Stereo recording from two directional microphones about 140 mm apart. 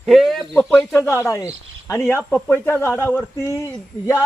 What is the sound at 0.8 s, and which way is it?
A man's voice, 15° left (ahead or behind).